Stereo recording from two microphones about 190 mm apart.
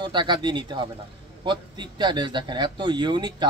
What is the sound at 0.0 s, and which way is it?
Speech, 25° right (ahead or behind).